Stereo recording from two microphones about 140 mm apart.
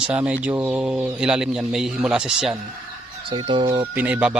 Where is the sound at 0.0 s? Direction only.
10° right (ahead or behind).